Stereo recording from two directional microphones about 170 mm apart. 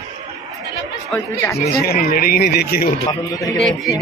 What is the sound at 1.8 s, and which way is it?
Speech, 60° left (ahead or behind).